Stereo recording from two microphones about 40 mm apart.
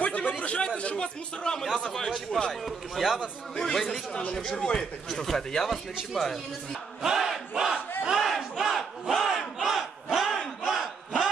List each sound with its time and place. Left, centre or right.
0.0 s a sound: left
0.4 s chatter: left
1.4 s speech: centre
2.6 s speech: centre
3.7 s speech: centre
4.4 s speech: centre
7.0 s battle cry: centre
8.3 s battle cry: centre
8.7 s crowd: centre
10.6 s battle cry: centre